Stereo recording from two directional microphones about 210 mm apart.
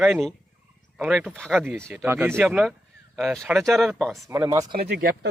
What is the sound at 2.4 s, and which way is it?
Speech, centre (ahead or behind).